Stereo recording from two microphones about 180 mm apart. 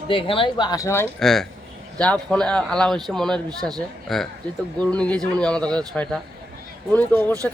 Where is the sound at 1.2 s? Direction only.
Centre (ahead or behind).